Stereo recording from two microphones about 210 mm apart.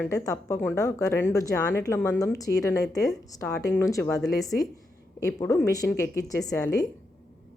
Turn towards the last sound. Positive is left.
turn(degrees=15)  # may be behind; listen again after turning